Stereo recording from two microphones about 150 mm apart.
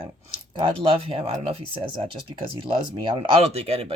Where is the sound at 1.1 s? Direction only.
40° right (ahead or behind).